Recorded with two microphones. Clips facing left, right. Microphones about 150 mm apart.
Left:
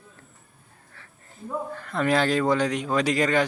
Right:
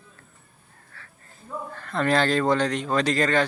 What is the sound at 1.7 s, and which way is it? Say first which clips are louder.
Speech: right 1 dB; 10° left (ahead or behind).